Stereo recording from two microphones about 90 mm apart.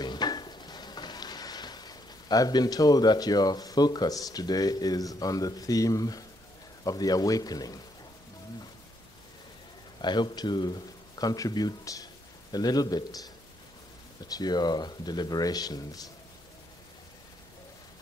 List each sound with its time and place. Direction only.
0.0 s dishes: 50° left (ahead or behind)
6.8 s speech: 40° left (ahead or behind)
10.0 s speech: 55° left (ahead or behind)